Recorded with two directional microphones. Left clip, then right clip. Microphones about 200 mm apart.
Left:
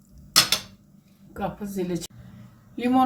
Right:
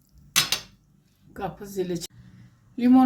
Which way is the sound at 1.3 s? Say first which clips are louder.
Left 1 dB; 15° right (ahead or behind).